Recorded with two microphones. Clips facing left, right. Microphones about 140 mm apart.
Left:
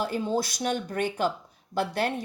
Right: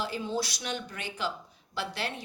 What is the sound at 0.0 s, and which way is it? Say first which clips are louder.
Speech: left 5 dB; 50° left (ahead or behind).